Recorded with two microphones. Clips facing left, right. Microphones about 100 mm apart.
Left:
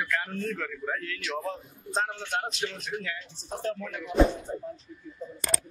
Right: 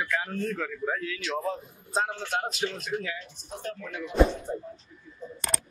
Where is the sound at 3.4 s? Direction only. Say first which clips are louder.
Left 5 dB; 30° left (ahead or behind).